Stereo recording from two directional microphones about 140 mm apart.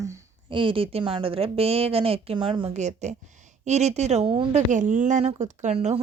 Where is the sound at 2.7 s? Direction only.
55° right (ahead or behind).